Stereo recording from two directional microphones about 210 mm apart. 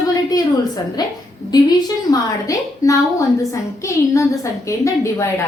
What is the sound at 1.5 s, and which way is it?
A woman's voice, 20° left (ahead or behind).